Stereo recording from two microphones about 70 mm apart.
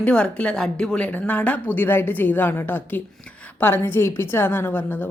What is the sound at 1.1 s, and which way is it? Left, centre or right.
A woman's voice, left.